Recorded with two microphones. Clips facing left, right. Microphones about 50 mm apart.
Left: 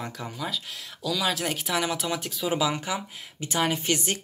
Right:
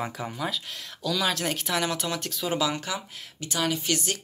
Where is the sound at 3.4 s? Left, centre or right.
Left.